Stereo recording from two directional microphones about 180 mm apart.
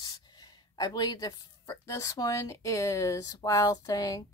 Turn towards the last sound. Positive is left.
turn(degrees=20)  # may be behind; listen again after turning